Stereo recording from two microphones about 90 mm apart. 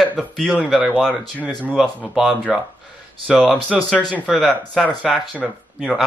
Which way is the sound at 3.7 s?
5° right (ahead or behind).